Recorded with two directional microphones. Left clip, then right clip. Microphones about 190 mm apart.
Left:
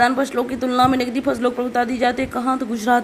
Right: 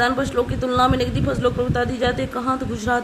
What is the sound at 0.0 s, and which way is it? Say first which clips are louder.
Speech: left 2 dB; 15° left (ahead or behind).